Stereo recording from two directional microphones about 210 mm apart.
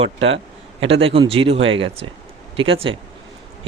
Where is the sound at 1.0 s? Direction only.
25° right (ahead or behind).